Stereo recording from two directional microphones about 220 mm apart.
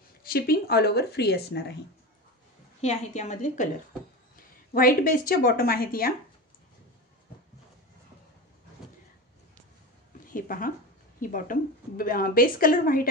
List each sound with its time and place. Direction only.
0.3 s speech: 45° left (ahead or behind)
2.8 s speech: 30° left (ahead or behind)
4.7 s speech: 40° left (ahead or behind)
10.2 s a sound: 40° left (ahead or behind)
11.1 s speech: 40° left (ahead or behind)